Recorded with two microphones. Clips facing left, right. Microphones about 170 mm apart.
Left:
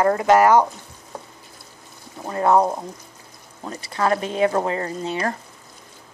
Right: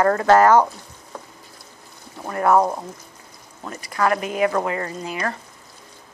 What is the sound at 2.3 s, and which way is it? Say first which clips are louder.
Speech: even; 20° left (ahead or behind).